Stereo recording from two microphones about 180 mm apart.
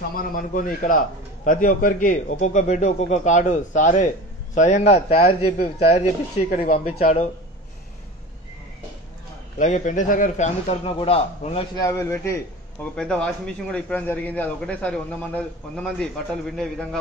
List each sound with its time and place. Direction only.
0.1 s a man's voice: 50° left (ahead or behind)
9.6 s a man's voice: 45° left (ahead or behind)
11.7 s a man's voice: 15° left (ahead or behind)
12.9 s a man's voice: 5° left (ahead or behind)